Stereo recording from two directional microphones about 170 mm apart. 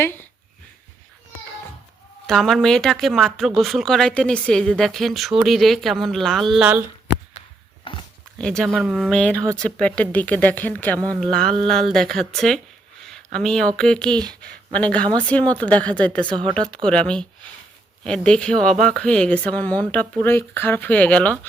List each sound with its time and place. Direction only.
2.2 s speech: centre (ahead or behind)
7.9 s dog: 30° left (ahead or behind)
8.4 s speech: 5° left (ahead or behind)
16.3 s speech: 30° right (ahead or behind)
16.6 s speech: 5° left (ahead or behind)